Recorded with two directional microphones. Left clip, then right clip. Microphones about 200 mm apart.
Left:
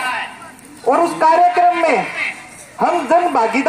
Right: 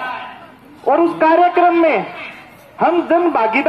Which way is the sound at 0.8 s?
35° right (ahead or behind).